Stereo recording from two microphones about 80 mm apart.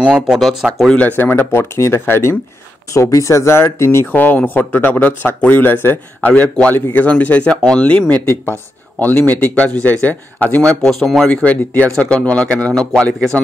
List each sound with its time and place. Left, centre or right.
0.0 s speech: centre
0.9 s speech: left
4.1 s speech: left
6.2 s speech: centre
8.1 s speech: left; by 11.2 s centre
11.2 s speech: centre